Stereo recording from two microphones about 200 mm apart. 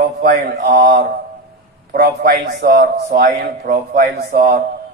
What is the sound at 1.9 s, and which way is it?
A man's voice, 50° right (ahead or behind).